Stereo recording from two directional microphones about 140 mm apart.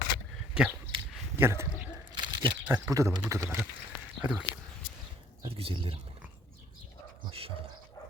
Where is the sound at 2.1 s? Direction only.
30° right (ahead or behind).